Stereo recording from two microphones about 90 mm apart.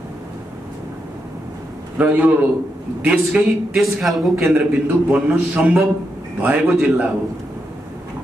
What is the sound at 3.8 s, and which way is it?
Speech, centre (ahead or behind).